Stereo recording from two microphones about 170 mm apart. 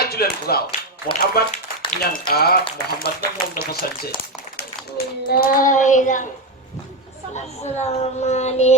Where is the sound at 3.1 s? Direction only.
60° left (ahead or behind).